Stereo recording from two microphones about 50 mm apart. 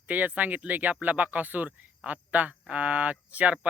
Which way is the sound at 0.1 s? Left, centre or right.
Right.